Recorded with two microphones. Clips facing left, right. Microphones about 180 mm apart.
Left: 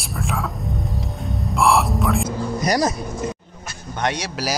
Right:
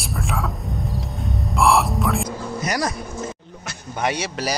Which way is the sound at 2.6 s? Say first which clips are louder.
Left 5 dB; 30° left (ahead or behind).